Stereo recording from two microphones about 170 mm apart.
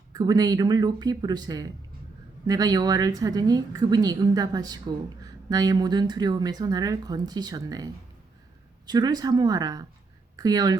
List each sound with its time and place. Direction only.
0.1 s a woman's voice: 20° right (ahead or behind)